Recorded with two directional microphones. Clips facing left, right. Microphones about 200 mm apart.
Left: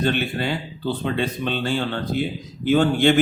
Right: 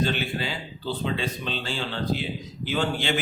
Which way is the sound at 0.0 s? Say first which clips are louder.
Left 4 dB; 55° left (ahead or behind).